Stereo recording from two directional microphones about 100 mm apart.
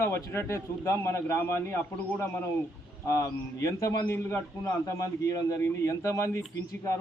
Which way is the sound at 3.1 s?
30° left (ahead or behind).